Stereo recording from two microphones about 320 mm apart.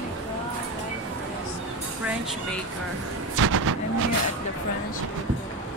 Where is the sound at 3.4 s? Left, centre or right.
Right.